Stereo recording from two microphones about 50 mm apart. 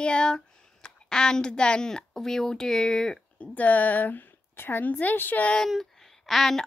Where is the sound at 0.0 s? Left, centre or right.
Centre.